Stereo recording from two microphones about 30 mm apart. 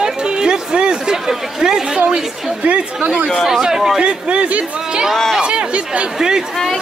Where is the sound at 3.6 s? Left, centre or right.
Centre.